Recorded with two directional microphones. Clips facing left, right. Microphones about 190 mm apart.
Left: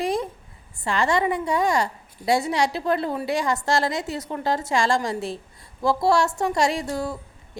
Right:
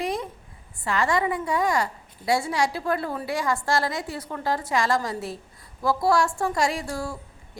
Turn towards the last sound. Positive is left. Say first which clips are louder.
# left 3 dB
turn(degrees=20)  # may be behind; listen again after turning